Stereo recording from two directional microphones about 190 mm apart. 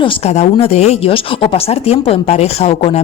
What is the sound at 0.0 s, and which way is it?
A woman's voice, 30° left (ahead or behind).